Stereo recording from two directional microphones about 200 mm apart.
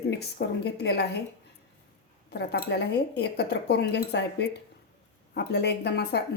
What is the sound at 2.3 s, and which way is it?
Speech, 55° left (ahead or behind).